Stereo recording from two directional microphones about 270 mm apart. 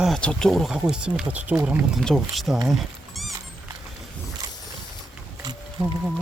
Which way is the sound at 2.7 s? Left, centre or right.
Centre.